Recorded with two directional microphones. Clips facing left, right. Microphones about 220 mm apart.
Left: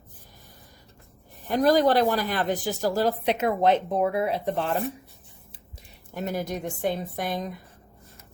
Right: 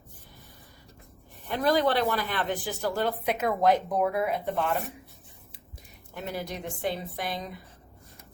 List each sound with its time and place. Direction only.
1.5 s speech: 40° left (ahead or behind)
3.4 s speech: 25° left (ahead or behind)
6.1 s a woman's voice: 45° left (ahead or behind)